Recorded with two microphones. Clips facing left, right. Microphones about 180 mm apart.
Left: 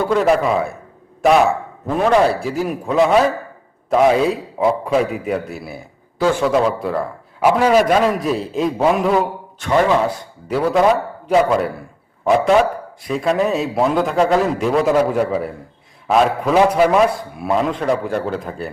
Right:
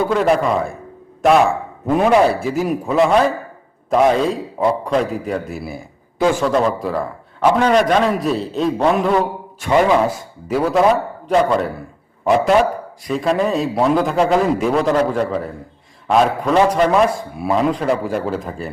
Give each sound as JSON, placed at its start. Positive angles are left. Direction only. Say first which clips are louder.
{"t": 0.0, "sound": "a man's voice", "louder": "even", "side_deg": 0}
{"t": 9.6, "sound": "a man's voice", "louder": "right 1 dB", "side_deg": -10}